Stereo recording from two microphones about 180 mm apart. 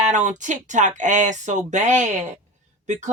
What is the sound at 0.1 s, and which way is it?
Speech, 45° right (ahead or behind).